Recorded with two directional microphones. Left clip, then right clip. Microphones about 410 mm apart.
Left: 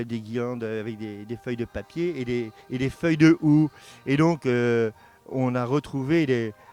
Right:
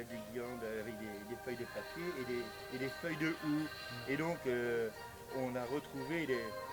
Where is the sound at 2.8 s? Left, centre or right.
Left.